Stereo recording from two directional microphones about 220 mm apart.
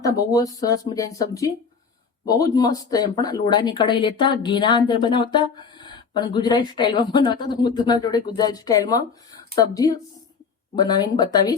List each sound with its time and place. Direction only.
0.0 s speech: 15° left (ahead or behind)